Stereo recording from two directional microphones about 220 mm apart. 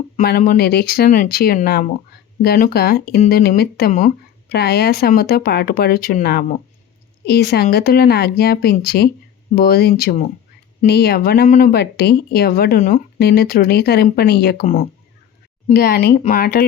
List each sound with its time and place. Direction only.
0.2 s speech: 45° left (ahead or behind)